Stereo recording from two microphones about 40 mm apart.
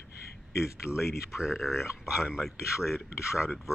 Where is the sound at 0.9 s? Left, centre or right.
Left.